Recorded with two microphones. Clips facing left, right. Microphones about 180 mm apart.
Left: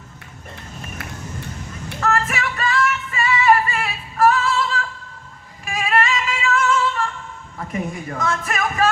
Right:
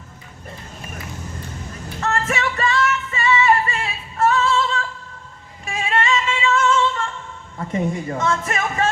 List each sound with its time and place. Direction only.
2.0 s music: 30° right (ahead or behind)
7.7 s speech: 30° right (ahead or behind)